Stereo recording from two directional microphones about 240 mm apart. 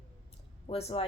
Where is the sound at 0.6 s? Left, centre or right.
Left.